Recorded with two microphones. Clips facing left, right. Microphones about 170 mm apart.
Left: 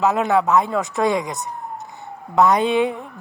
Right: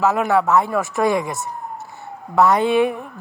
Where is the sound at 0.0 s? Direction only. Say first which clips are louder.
Even; 20° left (ahead or behind).